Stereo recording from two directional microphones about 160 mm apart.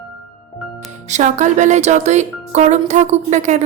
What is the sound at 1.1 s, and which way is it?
Speech, 45° right (ahead or behind).